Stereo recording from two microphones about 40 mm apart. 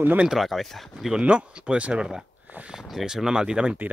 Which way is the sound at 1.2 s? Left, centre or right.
Right.